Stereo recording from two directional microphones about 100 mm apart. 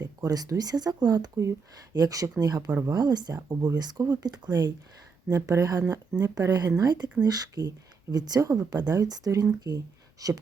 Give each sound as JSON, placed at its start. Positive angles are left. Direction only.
{"t": 0.0, "sound": "speech", "side_deg": -40}